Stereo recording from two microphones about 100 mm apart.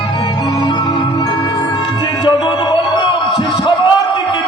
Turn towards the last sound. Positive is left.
turn(degrees=45)  # may be behind; listen again after turning